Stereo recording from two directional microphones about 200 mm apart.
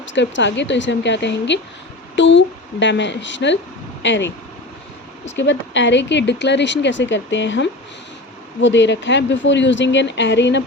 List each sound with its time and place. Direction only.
0.0 s speech: 65° left (ahead or behind)